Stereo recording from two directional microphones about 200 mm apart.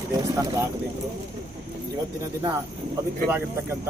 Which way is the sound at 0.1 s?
15° right (ahead or behind).